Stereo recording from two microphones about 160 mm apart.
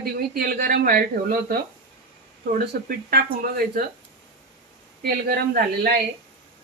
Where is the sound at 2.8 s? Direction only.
70° right (ahead or behind).